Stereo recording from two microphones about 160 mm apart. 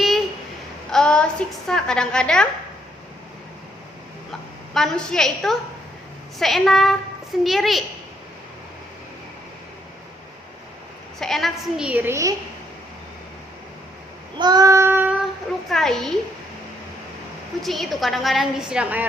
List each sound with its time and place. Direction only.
0.9 s a woman's voice: 5° left (ahead or behind)
4.3 s a woman's voice: centre (ahead or behind)
11.2 s a woman's voice: centre (ahead or behind); by 12.3 s 15° right (ahead or behind)
14.3 s child singing: 25° right (ahead or behind)
15.7 s a woman's voice: 5° left (ahead or behind)
17.6 s a woman's voice: centre (ahead or behind)